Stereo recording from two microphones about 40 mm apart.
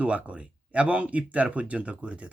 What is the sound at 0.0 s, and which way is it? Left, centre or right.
Speech, right.